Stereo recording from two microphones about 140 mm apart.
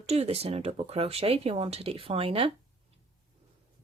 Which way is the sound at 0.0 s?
45° right (ahead or behind).